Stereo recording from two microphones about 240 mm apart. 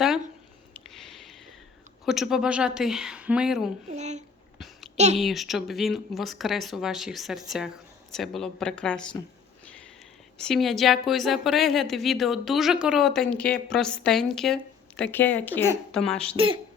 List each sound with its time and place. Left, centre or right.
0.7 s a sound: centre
2.0 s a woman's voice: centre
3.8 s a woman's voice: right
4.5 s a sound: centre
5.1 s a woman's voice: centre
10.3 s a woman's voice: centre